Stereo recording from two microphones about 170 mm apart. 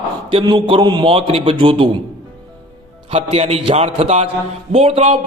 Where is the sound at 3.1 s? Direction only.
40° right (ahead or behind).